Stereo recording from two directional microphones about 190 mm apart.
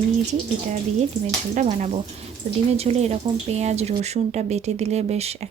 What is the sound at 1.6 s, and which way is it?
Speech, 40° right (ahead or behind).